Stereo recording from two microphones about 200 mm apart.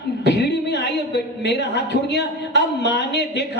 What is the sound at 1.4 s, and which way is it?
A man's voice, 60° left (ahead or behind).